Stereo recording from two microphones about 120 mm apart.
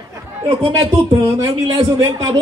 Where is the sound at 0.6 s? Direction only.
45° right (ahead or behind).